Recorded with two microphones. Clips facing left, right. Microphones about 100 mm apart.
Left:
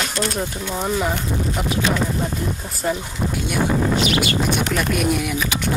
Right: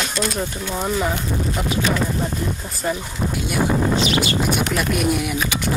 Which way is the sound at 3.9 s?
25° right (ahead or behind).